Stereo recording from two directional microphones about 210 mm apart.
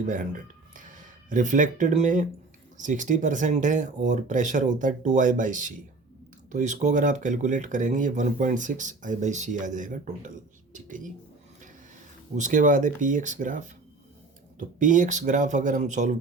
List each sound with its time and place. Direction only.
1.3 s speech: 35° right (ahead or behind)
12.4 s speech: 40° right (ahead or behind)
14.8 s speech: 35° right (ahead or behind)